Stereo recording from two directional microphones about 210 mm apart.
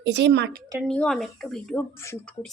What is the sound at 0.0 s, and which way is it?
Speech, 55° right (ahead or behind).